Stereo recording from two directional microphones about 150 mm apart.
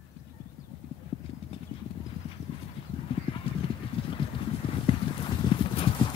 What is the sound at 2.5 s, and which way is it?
Clip-clop, 35° left (ahead or behind).